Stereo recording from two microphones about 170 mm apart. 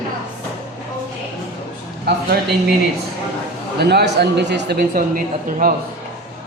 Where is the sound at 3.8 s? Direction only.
75° right (ahead or behind); by 5.7 s 55° right (ahead or behind).